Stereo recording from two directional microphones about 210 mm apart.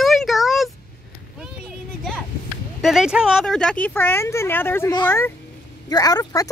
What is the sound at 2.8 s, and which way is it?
Speech, centre (ahead or behind).